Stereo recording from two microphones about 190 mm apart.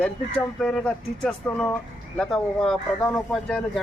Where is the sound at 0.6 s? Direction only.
5° left (ahead or behind).